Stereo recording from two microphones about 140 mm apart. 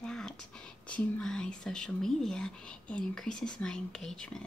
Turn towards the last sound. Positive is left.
turn(degrees=5)  # may be behind; listen again after turning